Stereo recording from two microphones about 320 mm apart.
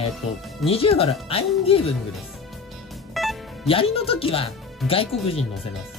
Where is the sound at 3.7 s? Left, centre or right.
Centre.